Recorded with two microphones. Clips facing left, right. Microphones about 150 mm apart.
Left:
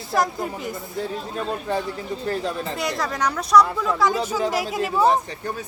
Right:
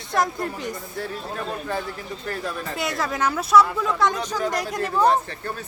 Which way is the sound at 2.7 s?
Centre (ahead or behind).